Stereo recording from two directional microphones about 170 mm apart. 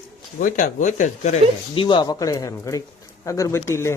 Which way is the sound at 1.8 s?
25° left (ahead or behind).